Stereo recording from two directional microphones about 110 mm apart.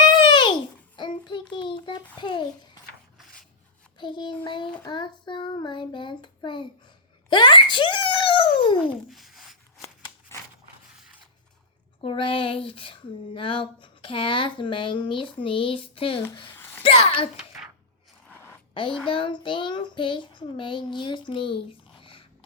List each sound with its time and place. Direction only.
0.1 s babbling: 40° left (ahead or behind)
0.9 s child singing: 45° left (ahead or behind)
2.1 s a child's voice: 45° left (ahead or behind)
3.9 s speech: 45° left (ahead or behind)
9.0 s a sound: centre (ahead or behind)
9.8 s scissors: 25° left (ahead or behind)
12.0 s speech: 55° left (ahead or behind)
16.6 s a sound: 20° left (ahead or behind)
16.8 s a child's voice: 60° left (ahead or behind)
18.3 s a sound: 20° left (ahead or behind)
18.7 s a woman's voice: 50° left (ahead or behind)